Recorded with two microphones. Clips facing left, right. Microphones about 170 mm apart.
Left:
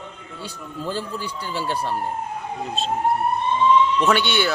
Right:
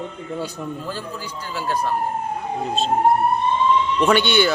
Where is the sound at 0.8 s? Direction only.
30° left (ahead or behind).